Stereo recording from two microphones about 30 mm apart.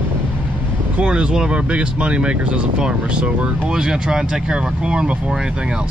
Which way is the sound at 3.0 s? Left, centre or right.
Right.